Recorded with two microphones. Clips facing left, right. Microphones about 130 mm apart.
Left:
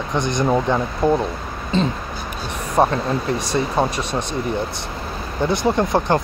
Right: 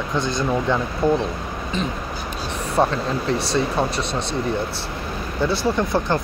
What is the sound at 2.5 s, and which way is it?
Speech, 15° left (ahead or behind).